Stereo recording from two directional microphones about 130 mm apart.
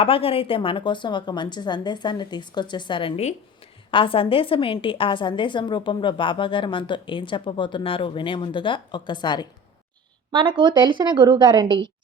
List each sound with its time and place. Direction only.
0.0 s a woman's voice: 45° left (ahead or behind)
10.3 s a woman's voice: 40° right (ahead or behind)